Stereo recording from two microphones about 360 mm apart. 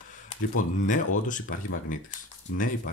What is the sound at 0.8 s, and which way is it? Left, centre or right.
Speech, left.